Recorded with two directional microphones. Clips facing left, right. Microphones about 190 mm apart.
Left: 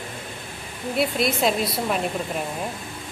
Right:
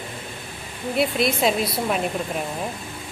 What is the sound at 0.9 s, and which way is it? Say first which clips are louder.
A woman's voice: right 1 dB; centre (ahead or behind).